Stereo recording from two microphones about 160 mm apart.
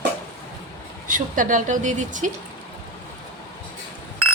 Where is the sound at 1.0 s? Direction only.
55° right (ahead or behind).